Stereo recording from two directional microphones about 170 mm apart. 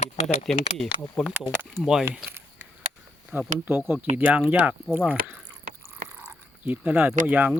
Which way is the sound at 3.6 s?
10° right (ahead or behind).